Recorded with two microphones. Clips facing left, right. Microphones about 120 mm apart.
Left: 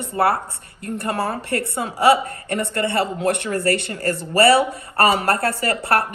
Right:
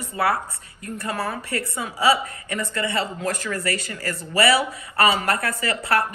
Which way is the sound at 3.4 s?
30° left (ahead or behind).